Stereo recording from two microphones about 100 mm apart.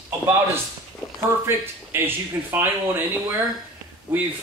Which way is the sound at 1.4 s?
20° right (ahead or behind).